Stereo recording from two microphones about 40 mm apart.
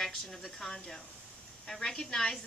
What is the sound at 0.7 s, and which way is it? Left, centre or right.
A woman's voice, centre.